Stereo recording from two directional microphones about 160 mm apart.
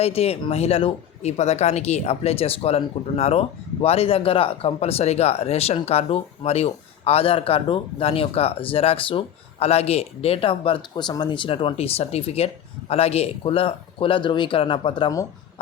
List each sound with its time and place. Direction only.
0.0 s speech: 40° left (ahead or behind)